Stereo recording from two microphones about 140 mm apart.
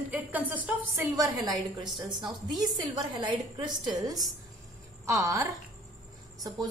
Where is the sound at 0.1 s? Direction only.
10° right (ahead or behind).